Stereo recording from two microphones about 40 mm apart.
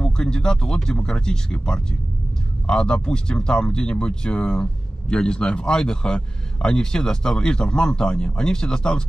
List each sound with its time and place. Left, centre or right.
0.0 s a man's voice: centre